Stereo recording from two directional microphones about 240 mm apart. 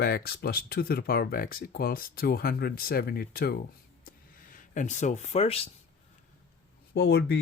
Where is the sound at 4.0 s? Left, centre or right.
Left.